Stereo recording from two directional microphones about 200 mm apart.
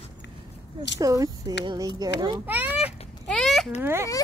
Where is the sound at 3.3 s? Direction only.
Centre (ahead or behind).